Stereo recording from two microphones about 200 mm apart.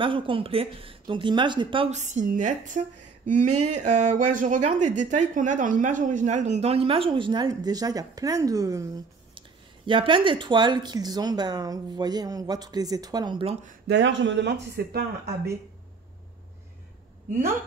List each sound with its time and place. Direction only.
0.0 s speech: 25° right (ahead or behind)
13.8 s speech: 65° right (ahead or behind)